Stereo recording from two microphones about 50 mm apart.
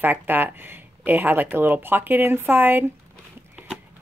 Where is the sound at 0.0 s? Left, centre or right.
Right.